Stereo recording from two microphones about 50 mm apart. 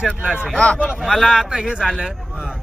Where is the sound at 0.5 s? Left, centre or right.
Centre.